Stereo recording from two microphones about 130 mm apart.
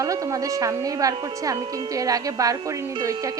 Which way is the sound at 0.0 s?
25° right (ahead or behind).